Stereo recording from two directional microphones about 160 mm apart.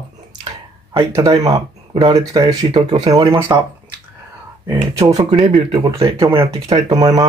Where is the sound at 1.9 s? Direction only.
35° right (ahead or behind).